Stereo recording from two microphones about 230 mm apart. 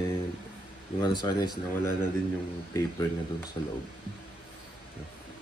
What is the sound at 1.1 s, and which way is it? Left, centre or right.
Speech, centre.